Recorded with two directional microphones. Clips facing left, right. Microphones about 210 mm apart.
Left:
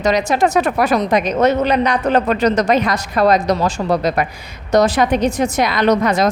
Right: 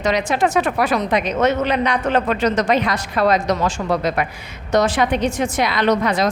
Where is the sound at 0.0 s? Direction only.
40° left (ahead or behind).